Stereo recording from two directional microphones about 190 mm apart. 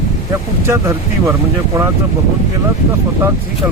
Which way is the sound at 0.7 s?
15° right (ahead or behind).